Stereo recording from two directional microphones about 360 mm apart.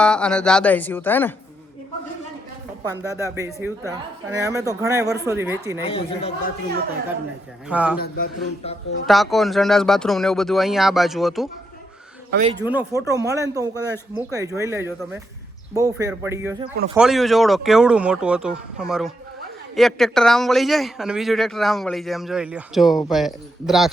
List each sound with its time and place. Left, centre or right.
0.0 s a man's voice: centre
2.8 s speech: centre
5.8 s speech: centre
7.7 s a man's voice: centre
8.0 s a man's voice: left
9.0 s a man's voice: centre
12.3 s speech: right
12.6 s a man's voice: centre